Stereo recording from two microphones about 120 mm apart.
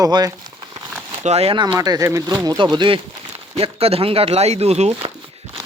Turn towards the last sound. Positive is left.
turn(degrees=-60)  # may be behind; listen again after turning